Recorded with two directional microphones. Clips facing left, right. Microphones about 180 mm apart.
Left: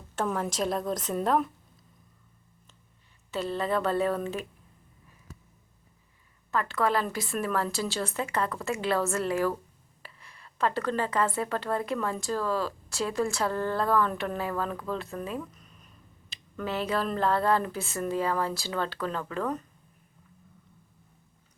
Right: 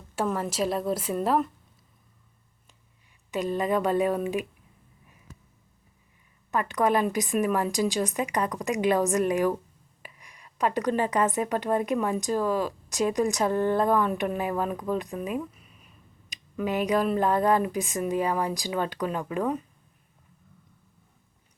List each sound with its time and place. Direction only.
0.3 s a woman's voice: centre (ahead or behind)
3.3 s a woman's voice: 15° right (ahead or behind)
6.5 s a woman's voice: 15° right (ahead or behind)